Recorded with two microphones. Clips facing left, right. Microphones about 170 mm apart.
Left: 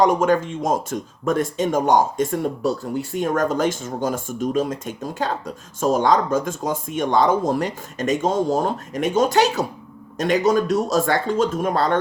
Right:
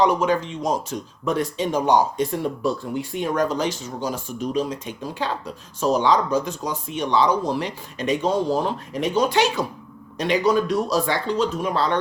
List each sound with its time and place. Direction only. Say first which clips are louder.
0.0 s speech: left 2 dB; 45° left (ahead or behind)